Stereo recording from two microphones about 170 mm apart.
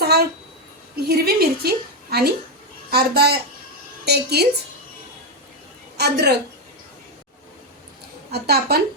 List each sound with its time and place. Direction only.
0.0 s a sound: 70° right (ahead or behind)
0.9 s a woman's voice: 70° right (ahead or behind)
6.0 s a woman's voice: 70° right (ahead or behind)
8.3 s a woman's voice: 70° right (ahead or behind)